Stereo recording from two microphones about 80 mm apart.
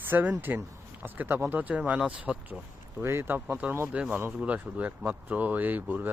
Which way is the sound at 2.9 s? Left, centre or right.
Right.